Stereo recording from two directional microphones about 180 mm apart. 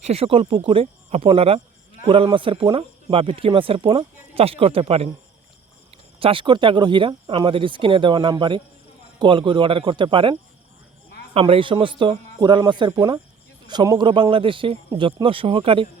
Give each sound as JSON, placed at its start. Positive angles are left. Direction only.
{"t": 0.0, "sound": "speech", "side_deg": -35}
{"t": 6.1, "sound": "speech", "side_deg": -30}
{"t": 11.3, "sound": "speech", "side_deg": -30}